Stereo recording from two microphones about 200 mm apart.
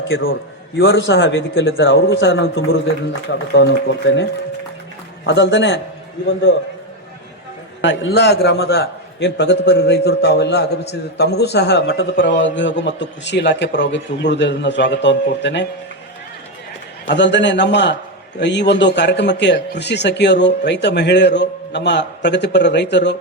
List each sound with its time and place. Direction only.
0.8 s a man's voice: 70° left (ahead or behind)
3.5 s a man's voice: 60° left (ahead or behind)
7.8 s a man's voice: 65° left (ahead or behind)
17.1 s a man's voice: 60° left (ahead or behind)